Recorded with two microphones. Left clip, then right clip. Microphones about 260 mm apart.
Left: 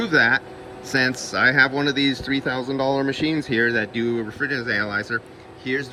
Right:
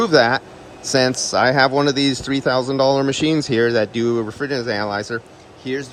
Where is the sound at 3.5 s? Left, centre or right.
Right.